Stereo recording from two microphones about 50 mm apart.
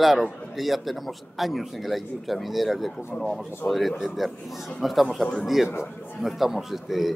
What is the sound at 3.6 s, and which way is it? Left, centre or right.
Speech, left.